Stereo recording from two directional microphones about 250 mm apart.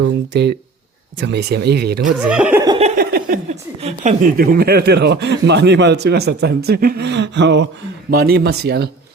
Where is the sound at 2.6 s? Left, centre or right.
Right.